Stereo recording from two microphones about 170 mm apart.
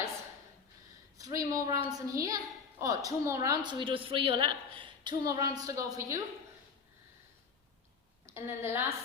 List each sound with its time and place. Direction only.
1.2 s a sound: 20° right (ahead or behind)
2.1 s a woman's voice: 20° right (ahead or behind)
8.3 s a woman's voice: 15° right (ahead or behind)